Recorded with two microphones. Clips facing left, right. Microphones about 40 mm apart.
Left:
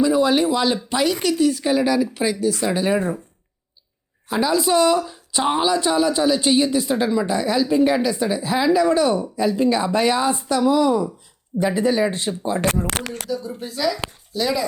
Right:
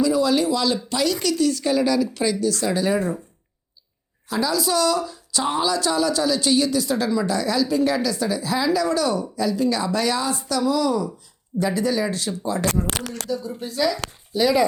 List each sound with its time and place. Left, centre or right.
0.0 s speech: left
4.3 s speech: left
12.9 s speech: left
13.3 s speech: centre
14.3 s speech: centre